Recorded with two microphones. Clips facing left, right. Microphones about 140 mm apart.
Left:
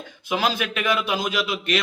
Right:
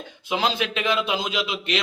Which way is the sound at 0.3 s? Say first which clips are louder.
Even; 25° right (ahead or behind).